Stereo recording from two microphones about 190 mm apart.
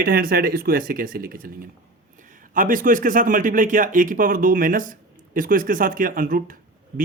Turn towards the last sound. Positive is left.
turn(degrees=-45)  # may be behind; listen again after turning